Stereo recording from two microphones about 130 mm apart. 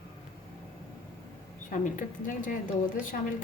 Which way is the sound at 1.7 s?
80° left.